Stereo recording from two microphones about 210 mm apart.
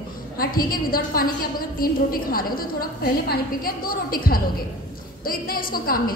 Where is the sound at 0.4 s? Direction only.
45° left (ahead or behind).